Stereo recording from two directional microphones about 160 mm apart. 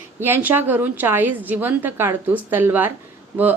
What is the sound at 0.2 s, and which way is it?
Speech, 10° right (ahead or behind).